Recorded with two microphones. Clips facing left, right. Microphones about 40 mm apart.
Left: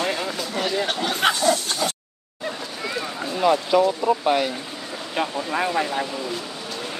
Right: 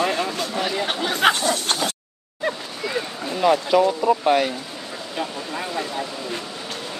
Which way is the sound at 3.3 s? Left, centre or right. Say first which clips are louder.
Right 1 dB; centre.